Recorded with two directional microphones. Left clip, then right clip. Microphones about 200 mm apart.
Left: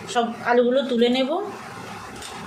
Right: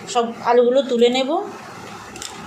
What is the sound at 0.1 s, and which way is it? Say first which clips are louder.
A woman's voice: right 4 dB; 20° right (ahead or behind).